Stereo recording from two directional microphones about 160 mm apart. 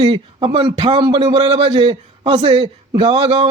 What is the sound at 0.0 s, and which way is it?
A man's voice, 35° right (ahead or behind).